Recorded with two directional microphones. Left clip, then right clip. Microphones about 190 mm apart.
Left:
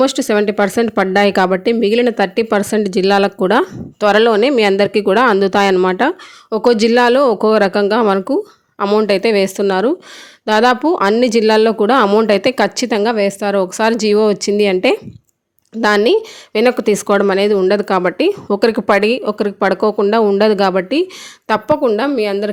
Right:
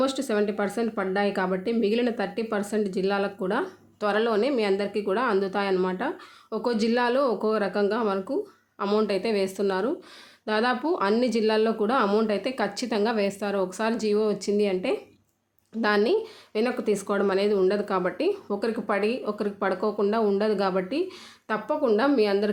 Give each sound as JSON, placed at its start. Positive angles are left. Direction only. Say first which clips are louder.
{"t": 0.0, "sound": "speech", "louder": "left 11 dB", "side_deg": 45}